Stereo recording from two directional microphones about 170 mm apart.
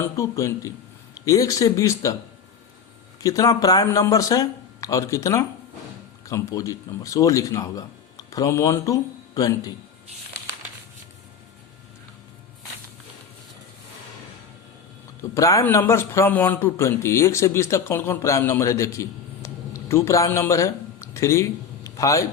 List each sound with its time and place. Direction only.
0.2 s speech: 20° left (ahead or behind)
3.2 s speech: 20° left (ahead or behind)
15.2 s a man's voice: 20° left (ahead or behind)